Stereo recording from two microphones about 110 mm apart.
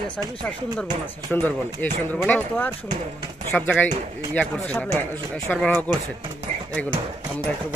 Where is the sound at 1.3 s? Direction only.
15° left (ahead or behind).